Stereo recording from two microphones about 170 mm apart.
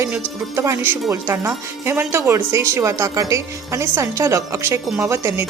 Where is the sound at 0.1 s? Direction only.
15° right (ahead or behind).